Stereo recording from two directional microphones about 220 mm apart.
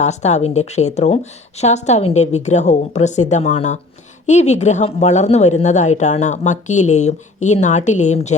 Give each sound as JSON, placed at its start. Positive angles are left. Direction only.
{"t": 0.0, "sound": "speech", "side_deg": 30}